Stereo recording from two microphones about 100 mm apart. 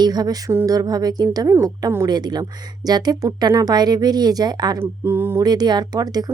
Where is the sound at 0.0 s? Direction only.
40° right (ahead or behind).